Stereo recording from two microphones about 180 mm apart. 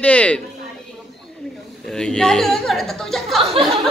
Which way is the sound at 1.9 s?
5° left (ahead or behind).